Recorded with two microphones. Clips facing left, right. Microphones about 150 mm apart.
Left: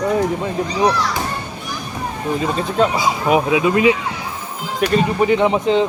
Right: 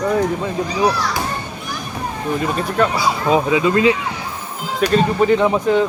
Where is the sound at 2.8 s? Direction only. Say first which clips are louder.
Left 1 dB; 15° left (ahead or behind).